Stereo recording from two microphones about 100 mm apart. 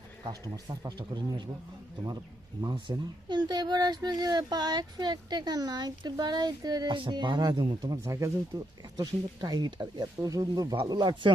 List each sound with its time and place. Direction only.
0.3 s speech: 40° right (ahead or behind)
2.6 s speech: 50° right (ahead or behind)
8.0 s speech: 30° right (ahead or behind); by 11.3 s 45° right (ahead or behind)